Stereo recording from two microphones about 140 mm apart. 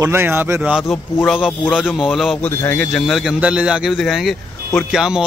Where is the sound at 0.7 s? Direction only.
5° right (ahead or behind).